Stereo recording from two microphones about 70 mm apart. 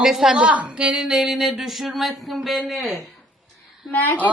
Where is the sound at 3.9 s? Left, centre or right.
Left.